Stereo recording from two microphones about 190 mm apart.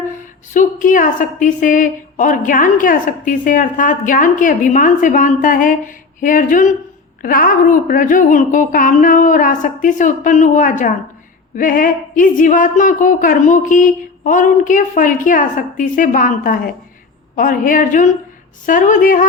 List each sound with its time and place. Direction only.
0.5 s a woman's voice: 45° left (ahead or behind)